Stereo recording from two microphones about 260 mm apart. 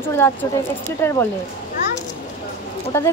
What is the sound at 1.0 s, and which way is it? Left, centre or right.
Speech, centre.